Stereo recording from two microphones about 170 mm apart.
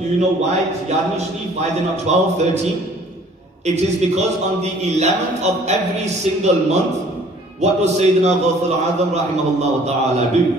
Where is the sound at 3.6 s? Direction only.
40° right (ahead or behind).